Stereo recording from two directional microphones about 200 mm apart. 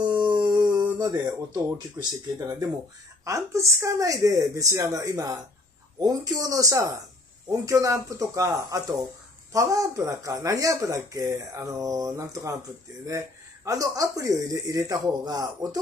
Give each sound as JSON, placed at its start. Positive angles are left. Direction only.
{"t": 0.0, "sound": "howl", "side_deg": -20}
{"t": 0.9, "sound": "speech", "side_deg": -20}
{"t": 13.7, "sound": "speech", "side_deg": -15}